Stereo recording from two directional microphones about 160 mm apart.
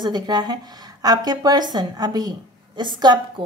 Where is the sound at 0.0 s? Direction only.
25° right (ahead or behind).